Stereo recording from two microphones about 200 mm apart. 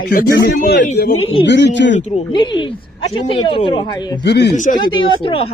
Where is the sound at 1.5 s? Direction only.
60° left (ahead or behind).